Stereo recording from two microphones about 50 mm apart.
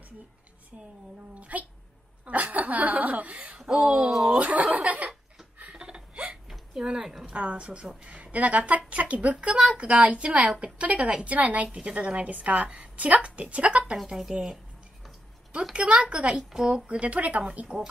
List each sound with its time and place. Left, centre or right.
1.3 s a woman's voice: right
3.6 s a woman's voice: centre
4.1 s speech: centre
4.4 s speech: right
5.6 s a sound: right
6.5 s hiccup: centre
6.9 s a woman's voice: centre
7.2 s a woman's voice: right
11.3 s a woman's voice: right
12.6 s a woman's voice: centre
12.9 s a woman's voice: right; by 14.6 s centre
15.7 s a woman's voice: right
17.0 s a woman's voice: right